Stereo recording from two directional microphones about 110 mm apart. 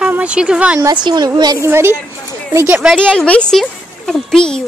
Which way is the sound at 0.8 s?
40° right (ahead or behind).